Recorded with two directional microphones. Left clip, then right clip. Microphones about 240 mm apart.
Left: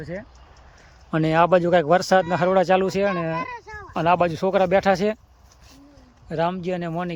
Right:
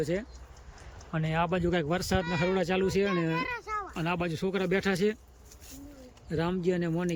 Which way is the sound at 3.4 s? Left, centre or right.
Centre.